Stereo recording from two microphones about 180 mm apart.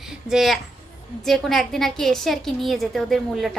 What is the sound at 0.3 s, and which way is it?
A woman's voice, centre (ahead or behind).